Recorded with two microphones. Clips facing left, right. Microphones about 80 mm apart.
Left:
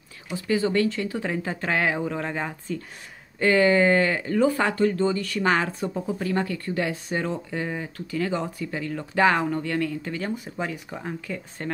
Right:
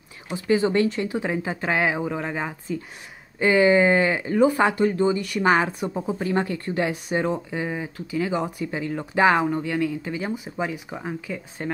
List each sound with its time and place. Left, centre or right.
0.3 s speech: right; by 11.7 s centre